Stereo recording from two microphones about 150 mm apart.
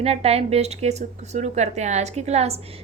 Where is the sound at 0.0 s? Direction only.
40° right (ahead or behind).